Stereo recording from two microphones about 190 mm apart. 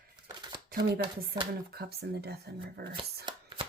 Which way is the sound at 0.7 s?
50° right (ahead or behind).